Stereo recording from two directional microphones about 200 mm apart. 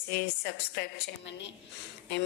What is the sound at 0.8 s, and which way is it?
Speech, 60° left (ahead or behind).